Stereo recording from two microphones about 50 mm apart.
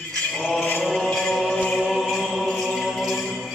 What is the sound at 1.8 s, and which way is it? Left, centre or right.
Music, centre.